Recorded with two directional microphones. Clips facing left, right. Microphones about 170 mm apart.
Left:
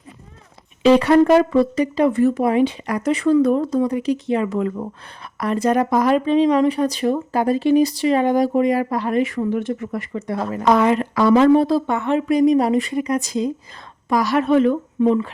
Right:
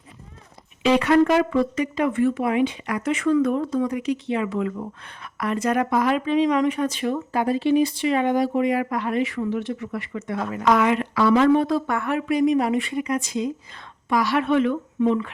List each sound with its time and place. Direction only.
0.8 s speech: 35° left (ahead or behind)
10.1 s speech: 35° left (ahead or behind)
12.3 s speech: 35° left (ahead or behind)